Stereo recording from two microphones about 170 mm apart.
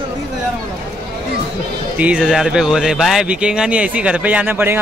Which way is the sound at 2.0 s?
5° right (ahead or behind).